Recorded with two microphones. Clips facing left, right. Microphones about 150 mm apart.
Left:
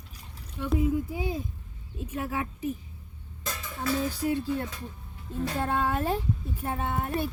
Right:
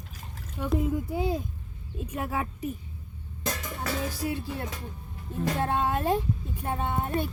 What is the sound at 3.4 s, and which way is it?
Music, 40° right (ahead or behind).